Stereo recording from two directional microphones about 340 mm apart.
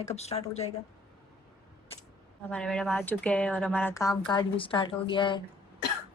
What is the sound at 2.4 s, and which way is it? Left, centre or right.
Speech, centre.